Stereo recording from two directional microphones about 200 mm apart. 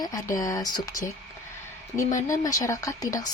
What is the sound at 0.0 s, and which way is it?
Speech, 15° left (ahead or behind).